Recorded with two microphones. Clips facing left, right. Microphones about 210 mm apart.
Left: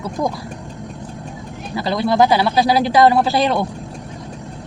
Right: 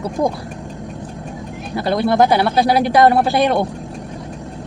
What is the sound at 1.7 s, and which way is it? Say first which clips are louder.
Speech: right 1 dB; 55° right (ahead or behind).